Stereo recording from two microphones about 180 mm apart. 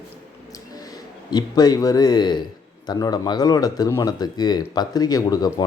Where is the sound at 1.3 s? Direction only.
20° left (ahead or behind).